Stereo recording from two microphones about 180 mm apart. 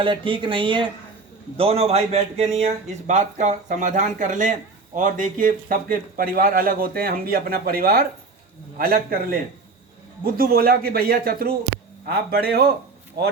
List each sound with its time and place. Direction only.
0.0 s a man's voice: 30° right (ahead or behind); by 12.6 s 60° right (ahead or behind)